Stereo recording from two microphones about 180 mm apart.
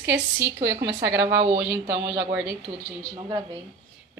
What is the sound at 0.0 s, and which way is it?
A woman's voice, 10° right (ahead or behind).